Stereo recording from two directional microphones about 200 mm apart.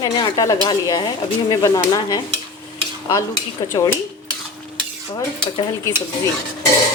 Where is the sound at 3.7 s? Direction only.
20° left (ahead or behind).